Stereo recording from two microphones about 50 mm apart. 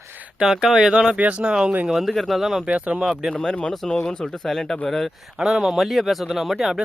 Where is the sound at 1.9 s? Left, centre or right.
Centre.